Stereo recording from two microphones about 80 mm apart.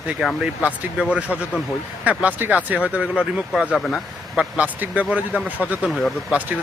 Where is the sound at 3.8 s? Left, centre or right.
Centre.